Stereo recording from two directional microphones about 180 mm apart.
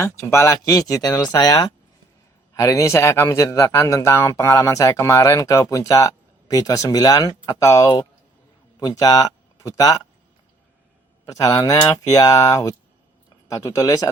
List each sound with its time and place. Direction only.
0.0 s speech: 15° left (ahead or behind)
11.3 s speech: 20° left (ahead or behind)